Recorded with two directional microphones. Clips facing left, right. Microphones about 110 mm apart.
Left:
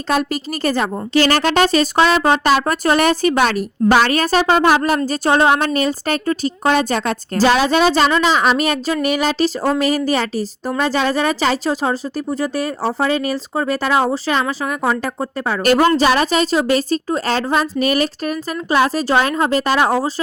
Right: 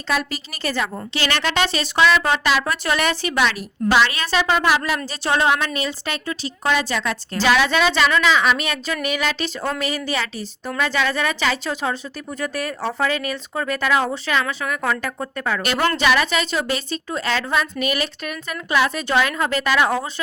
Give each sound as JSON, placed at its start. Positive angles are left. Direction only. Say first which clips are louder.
{"t": 0.1, "sound": "a woman's voice", "louder": "left 5 dB", "side_deg": 45}